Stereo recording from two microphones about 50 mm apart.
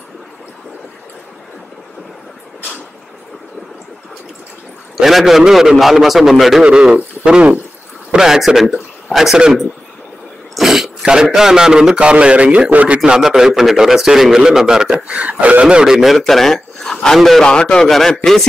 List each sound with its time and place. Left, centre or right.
4.9 s a man's voice: centre
10.5 s throat clearing: centre
11.3 s a man's voice: centre; by 13.0 s right
13.0 s speech: centre
15.0 s a man's voice: right; by 17.4 s centre
17.4 s a man's voice: centre
17.8 s a man's voice: centre